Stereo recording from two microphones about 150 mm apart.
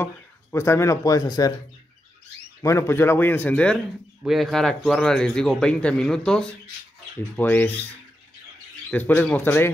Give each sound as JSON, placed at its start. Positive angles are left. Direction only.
{"t": 0.0, "sound": "speech", "side_deg": 15}
{"t": 2.6, "sound": "a man's voice", "side_deg": 20}
{"t": 8.9, "sound": "speech", "side_deg": 10}